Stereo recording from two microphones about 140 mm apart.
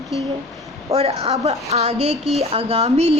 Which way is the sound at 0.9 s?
45° right (ahead or behind).